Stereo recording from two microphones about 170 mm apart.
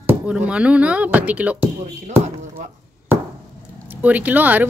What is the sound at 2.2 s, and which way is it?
Speech, 45° right (ahead or behind).